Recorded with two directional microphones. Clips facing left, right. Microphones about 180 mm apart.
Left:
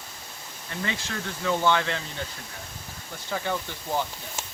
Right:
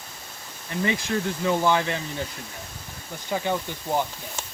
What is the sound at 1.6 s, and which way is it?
Speech, 10° right (ahead or behind).